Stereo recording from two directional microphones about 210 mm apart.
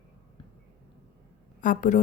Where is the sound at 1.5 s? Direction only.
40° left (ahead or behind).